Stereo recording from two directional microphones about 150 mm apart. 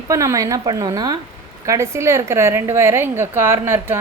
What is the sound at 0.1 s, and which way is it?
A woman's voice, 20° right (ahead or behind).